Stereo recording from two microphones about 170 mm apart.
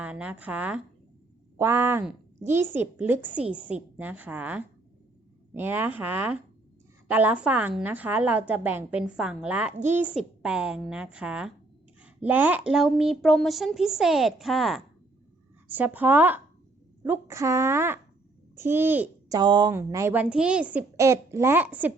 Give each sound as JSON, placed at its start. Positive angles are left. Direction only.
{"t": 0.0, "sound": "a woman's voice", "side_deg": -5}
{"t": 19.4, "sound": "a woman's voice", "side_deg": -25}